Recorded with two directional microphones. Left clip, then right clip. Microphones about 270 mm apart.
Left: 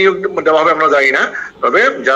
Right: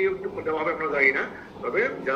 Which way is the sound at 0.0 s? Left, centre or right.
Left.